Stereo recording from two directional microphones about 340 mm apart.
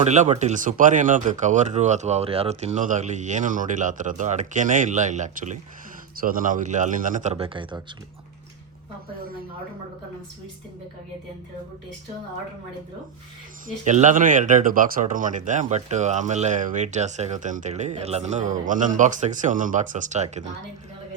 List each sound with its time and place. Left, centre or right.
0.0 s speech: right
13.7 s speech: right